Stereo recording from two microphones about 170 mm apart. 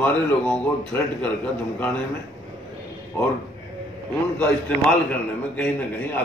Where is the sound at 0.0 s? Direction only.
10° left (ahead or behind).